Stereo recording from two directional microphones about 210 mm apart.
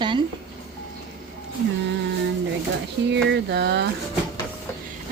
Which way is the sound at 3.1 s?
55° right (ahead or behind).